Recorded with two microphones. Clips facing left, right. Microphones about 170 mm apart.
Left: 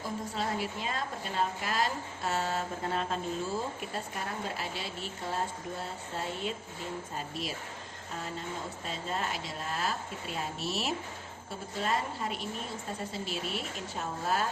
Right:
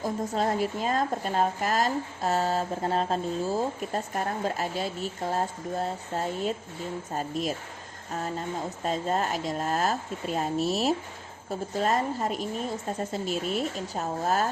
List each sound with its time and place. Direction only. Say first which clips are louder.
0.0 s speech: right 7 dB; 45° right (ahead or behind)